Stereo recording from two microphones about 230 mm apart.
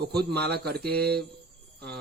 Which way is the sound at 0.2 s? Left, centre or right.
Right.